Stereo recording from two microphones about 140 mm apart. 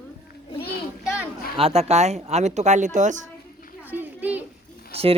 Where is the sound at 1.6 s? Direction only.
45° right (ahead or behind).